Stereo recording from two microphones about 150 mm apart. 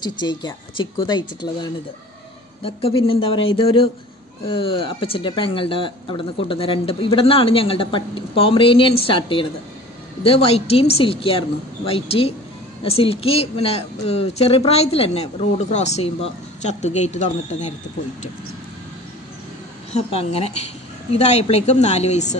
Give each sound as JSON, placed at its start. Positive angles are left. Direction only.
{"t": 0.0, "sound": "speech", "side_deg": 30}
{"t": 2.6, "sound": "a woman's voice", "side_deg": 40}
{"t": 19.9, "sound": "a woman's voice", "side_deg": 45}